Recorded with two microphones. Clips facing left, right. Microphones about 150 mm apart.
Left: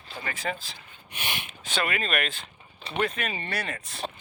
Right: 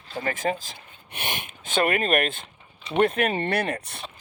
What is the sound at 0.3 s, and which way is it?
Speech, 45° right (ahead or behind).